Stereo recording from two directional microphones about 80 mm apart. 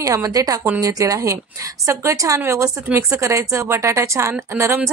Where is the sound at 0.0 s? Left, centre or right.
Right.